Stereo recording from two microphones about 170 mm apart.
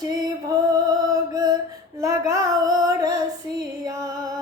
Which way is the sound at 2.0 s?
20° right (ahead or behind).